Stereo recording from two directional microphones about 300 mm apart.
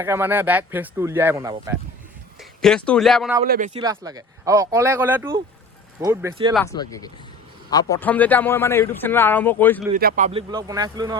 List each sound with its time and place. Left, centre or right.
0.0 s speech: centre
2.4 s speech: centre
3.4 s a man's voice: right
3.8 s speech: centre
6.5 s a man's voice: centre
9.9 s speech: right